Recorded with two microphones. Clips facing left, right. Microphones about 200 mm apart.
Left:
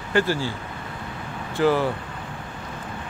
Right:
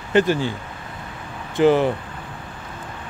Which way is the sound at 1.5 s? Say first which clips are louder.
Right 4 dB; 20° right (ahead or behind).